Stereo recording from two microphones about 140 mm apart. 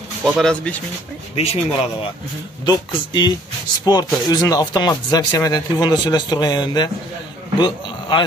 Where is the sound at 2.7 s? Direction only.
30° left (ahead or behind).